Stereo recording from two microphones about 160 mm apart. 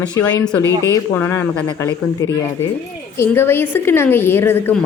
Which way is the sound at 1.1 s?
15° left (ahead or behind).